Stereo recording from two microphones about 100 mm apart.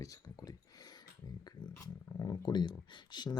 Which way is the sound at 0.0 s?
35° left (ahead or behind).